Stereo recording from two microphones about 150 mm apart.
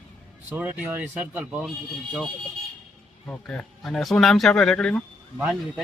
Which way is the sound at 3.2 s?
10° left (ahead or behind).